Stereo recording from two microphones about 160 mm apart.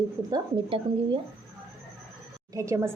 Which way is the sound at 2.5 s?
20° right (ahead or behind).